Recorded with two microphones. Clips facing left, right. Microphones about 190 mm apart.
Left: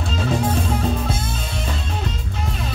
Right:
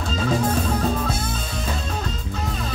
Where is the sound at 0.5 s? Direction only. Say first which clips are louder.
Even; 40° right (ahead or behind).